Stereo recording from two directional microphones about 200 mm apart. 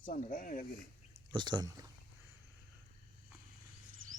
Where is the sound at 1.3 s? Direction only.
20° right (ahead or behind).